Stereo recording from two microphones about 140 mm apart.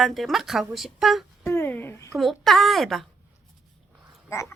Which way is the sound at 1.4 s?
20° left (ahead or behind).